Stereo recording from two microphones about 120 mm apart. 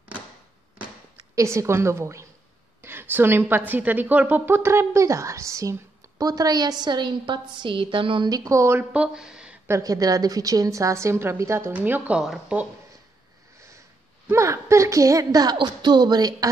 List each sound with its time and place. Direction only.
1.3 s a woman's voice: 25° right (ahead or behind); by 8.3 s 45° right (ahead or behind)
8.3 s a woman's voice: 25° right (ahead or behind)
8.9 s speech: 5° right (ahead or behind)
9.7 s a woman's voice: 30° right (ahead or behind); by 12.6 s 5° right (ahead or behind)
14.3 s speech: 25° right (ahead or behind)